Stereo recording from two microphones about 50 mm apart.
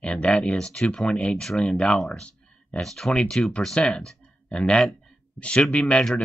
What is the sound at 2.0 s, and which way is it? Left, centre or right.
Speech, centre.